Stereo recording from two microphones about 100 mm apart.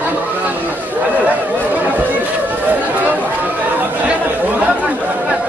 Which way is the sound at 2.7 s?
15° right (ahead or behind).